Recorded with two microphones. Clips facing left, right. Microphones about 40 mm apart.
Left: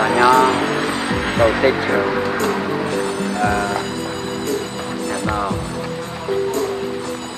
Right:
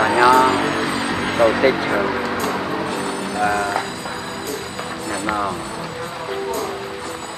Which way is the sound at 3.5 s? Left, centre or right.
Centre.